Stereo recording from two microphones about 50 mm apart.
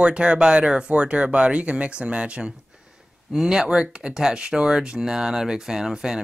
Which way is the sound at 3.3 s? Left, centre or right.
Centre.